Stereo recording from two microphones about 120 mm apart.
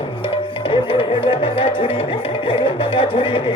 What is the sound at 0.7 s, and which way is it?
Music, 50° left (ahead or behind).